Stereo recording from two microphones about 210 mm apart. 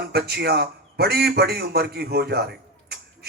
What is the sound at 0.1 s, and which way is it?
A man's voice, 50° right (ahead or behind).